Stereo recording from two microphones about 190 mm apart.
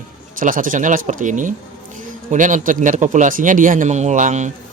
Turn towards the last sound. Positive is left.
turn(degrees=-40)  # may be behind; listen again after turning